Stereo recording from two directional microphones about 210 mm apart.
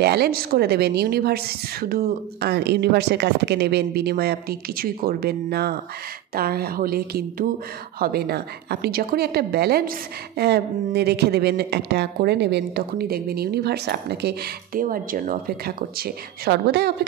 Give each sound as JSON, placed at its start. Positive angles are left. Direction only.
{"t": 0.0, "sound": "a woman's voice", "side_deg": -50}